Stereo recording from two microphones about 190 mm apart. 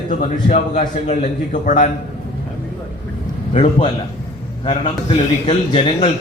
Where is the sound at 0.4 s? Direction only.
40° left (ahead or behind).